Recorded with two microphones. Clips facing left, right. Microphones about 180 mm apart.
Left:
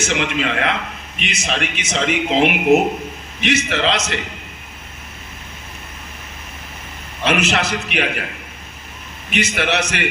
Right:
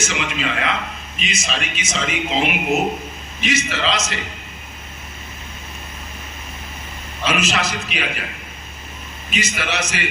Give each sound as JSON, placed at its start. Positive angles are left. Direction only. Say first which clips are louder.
{"t": 0.0, "sound": "speech", "louder": "left 4 dB", "side_deg": 60}
{"t": 7.3, "sound": "speech", "louder": "left 3 dB", "side_deg": 65}
{"t": 9.3, "sound": "speech", "louder": "left 5 dB", "side_deg": 65}